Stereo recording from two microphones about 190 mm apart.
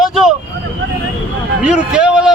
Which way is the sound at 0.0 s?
Centre (ahead or behind).